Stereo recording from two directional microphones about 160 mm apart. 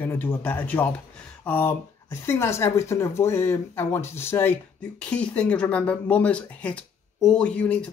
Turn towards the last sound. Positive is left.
turn(degrees=5)  # may be behind; listen again after turning